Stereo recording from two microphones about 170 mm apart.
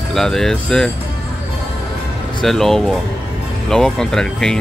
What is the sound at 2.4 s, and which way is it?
Speech, centre (ahead or behind).